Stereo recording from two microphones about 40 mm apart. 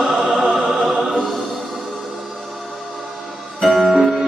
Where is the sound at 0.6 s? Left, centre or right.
Centre.